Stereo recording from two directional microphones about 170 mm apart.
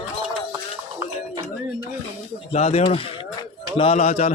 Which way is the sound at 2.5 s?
35° left (ahead or behind).